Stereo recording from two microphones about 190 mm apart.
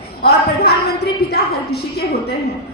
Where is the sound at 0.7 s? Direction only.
55° left (ahead or behind).